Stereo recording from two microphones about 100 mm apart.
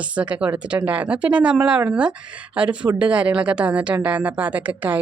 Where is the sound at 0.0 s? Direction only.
15° right (ahead or behind).